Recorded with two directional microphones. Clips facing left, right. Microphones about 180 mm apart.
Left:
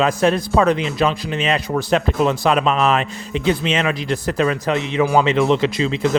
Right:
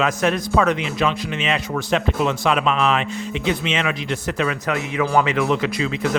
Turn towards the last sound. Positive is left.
turn(degrees=30)  # may be behind; listen again after turning